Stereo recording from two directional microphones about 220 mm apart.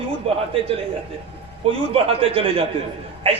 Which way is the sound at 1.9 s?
25° right (ahead or behind).